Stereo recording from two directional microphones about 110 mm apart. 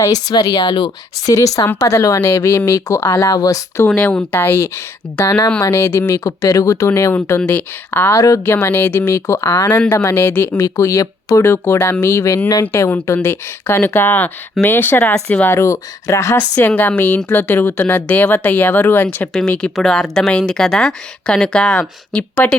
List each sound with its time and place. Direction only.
0.0 s speech: 35° left (ahead or behind)
1.6 s speech: 25° left (ahead or behind)
3.8 s speech: 10° left (ahead or behind)
8.1 s speech: 30° left (ahead or behind)
10.2 s speech: 20° left (ahead or behind)
19.3 s speech: 5° left (ahead or behind)